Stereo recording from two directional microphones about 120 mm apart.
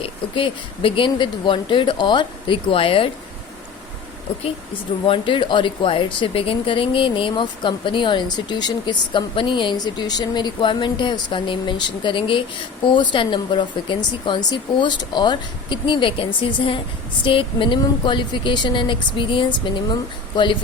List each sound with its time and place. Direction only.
0.0 s speech: 50° left (ahead or behind)
4.4 s speech: 50° left (ahead or behind)